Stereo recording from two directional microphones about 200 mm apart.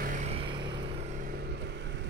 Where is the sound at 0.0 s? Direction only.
40° right (ahead or behind).